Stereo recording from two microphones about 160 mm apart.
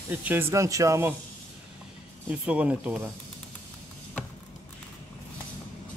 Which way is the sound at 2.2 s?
5° right (ahead or behind).